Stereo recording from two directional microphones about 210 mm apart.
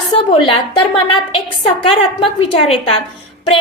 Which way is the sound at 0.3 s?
25° left (ahead or behind).